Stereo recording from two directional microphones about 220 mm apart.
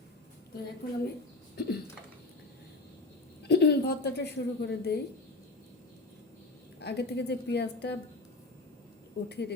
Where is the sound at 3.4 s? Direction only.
50° left (ahead or behind).